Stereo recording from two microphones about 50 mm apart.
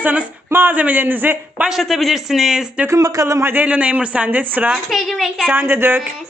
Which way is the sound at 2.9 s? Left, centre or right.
Right.